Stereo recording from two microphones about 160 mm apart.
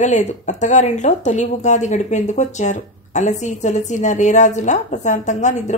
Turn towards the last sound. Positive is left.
turn(degrees=50)  # may be behind; listen again after turning